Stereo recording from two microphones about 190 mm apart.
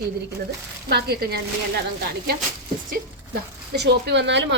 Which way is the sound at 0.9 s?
60° right (ahead or behind).